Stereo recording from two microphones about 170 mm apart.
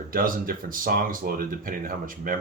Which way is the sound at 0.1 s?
55° right (ahead or behind).